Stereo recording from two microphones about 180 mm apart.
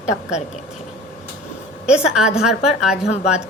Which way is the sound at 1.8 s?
5° right (ahead or behind).